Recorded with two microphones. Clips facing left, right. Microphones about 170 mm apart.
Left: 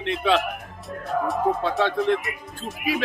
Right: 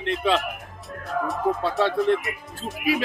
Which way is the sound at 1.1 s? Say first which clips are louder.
Left 2 dB; 40° left (ahead or behind).